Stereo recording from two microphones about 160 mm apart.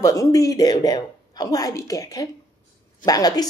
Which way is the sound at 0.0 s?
20° left (ahead or behind).